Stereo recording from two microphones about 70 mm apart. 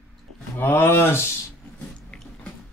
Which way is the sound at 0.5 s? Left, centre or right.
Left.